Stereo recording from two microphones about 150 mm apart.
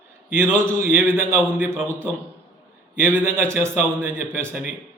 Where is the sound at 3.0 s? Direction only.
15° right (ahead or behind).